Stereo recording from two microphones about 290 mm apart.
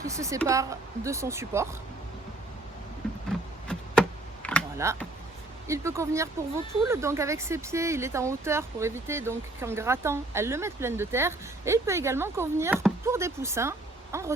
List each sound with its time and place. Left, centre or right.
0.0 s speech: centre
3.3 s a sound: centre
4.4 s computer keyboard: centre
4.8 s speech: centre